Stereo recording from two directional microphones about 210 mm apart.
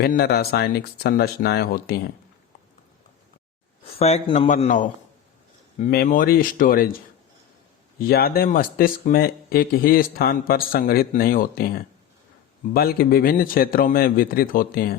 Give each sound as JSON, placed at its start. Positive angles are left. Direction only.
{"t": 0.0, "sound": "speech", "side_deg": 50}
{"t": 3.8, "sound": "speech", "side_deg": 30}
{"t": 5.9, "sound": "speech", "side_deg": 45}
{"t": 7.9, "sound": "speech", "side_deg": 45}